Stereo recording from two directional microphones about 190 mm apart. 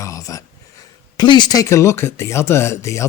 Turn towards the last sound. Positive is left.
turn(degrees=15)  # may be behind; listen again after turning